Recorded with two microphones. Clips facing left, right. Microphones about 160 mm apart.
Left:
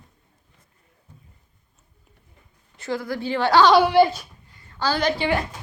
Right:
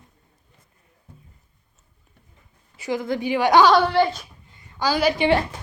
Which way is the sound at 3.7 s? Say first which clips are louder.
Left 2 dB; 10° left (ahead or behind).